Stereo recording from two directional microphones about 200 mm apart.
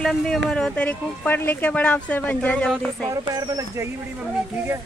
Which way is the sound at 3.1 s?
20° right (ahead or behind).